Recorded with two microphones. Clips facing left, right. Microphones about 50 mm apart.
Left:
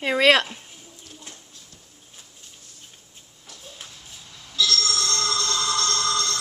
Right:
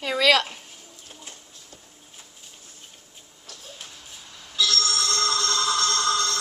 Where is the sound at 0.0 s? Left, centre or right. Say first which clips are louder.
Left 2 dB; left.